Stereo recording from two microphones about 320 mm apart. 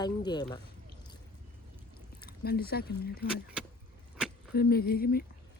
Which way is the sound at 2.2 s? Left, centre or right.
Left.